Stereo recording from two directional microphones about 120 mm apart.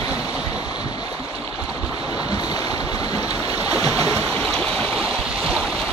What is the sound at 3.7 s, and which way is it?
Stream, 30° left (ahead or behind).